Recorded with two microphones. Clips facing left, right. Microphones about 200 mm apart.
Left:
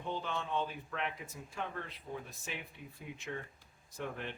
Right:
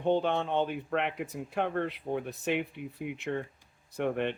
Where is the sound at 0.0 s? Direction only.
65° right (ahead or behind).